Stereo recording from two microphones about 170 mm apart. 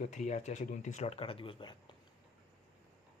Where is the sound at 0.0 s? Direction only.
45° left (ahead or behind); by 1.8 s 30° left (ahead or behind).